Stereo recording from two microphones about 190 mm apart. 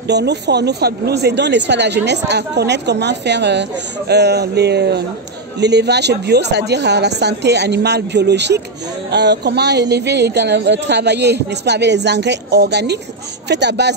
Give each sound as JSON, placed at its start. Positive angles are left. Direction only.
{"t": 0.0, "sound": "speech", "side_deg": -60}